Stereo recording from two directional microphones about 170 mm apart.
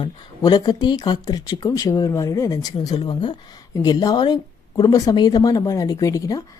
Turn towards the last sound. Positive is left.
turn(degrees=20)  # may be behind; listen again after turning